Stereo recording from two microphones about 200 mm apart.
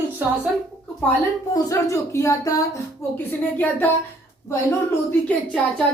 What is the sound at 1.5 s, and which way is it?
Speech, 15° left (ahead or behind).